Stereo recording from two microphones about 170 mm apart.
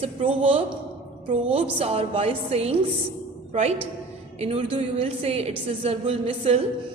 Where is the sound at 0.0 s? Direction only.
35° right (ahead or behind).